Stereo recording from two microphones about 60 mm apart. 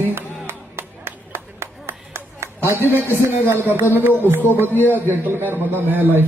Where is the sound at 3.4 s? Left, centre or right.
Right.